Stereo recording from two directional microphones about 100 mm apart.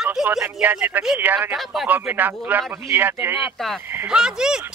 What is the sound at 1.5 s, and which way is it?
Speech, 5° right (ahead or behind).